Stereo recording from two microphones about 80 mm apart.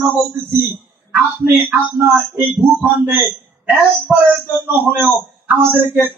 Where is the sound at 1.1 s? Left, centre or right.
Centre.